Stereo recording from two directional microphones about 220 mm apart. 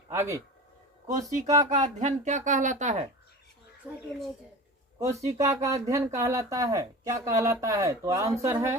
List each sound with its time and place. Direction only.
0.1 s speech: 15° right (ahead or behind)
1.0 s speech: 35° right (ahead or behind)
3.9 s speech: 5° right (ahead or behind)